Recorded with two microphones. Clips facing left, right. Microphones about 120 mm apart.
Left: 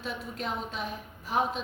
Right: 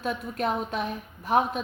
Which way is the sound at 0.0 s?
55° right (ahead or behind).